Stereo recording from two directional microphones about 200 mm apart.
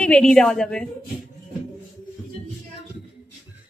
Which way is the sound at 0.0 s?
5° left (ahead or behind).